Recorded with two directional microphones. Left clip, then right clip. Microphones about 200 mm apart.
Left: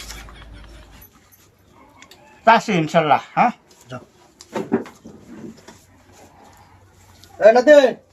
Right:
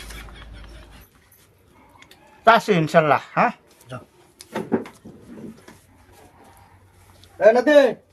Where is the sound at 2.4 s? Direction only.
45° right (ahead or behind).